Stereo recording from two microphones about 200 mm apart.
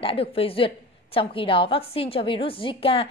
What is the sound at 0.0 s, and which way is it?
A woman's voice, 30° left (ahead or behind).